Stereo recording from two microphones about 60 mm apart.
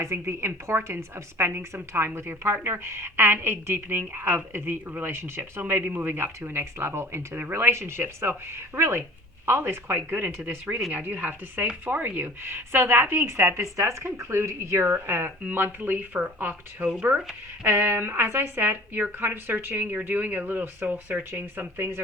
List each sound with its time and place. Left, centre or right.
0.0 s a woman's voice: right
13.7 s a woman's voice: right